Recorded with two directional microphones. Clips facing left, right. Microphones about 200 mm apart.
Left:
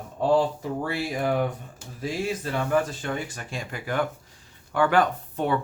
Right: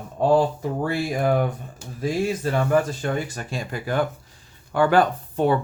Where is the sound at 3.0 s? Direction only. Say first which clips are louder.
Right 5 dB; 40° right (ahead or behind).